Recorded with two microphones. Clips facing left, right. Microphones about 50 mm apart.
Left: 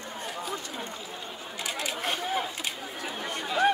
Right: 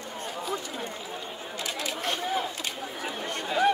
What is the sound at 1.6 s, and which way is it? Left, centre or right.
Chatter, centre.